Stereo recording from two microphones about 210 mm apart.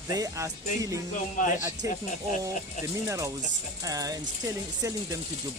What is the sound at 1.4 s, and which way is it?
Speech, 40° left (ahead or behind).